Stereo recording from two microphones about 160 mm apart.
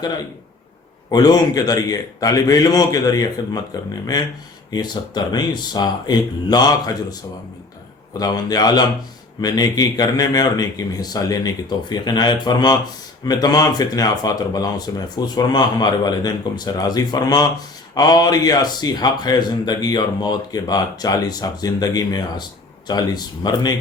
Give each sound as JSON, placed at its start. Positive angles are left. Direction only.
{"t": 1.1, "sound": "a man's voice", "side_deg": 25}
{"t": 4.7, "sound": "a man's voice", "side_deg": 25}